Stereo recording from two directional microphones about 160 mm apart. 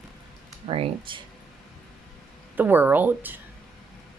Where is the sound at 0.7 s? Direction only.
35° right (ahead or behind).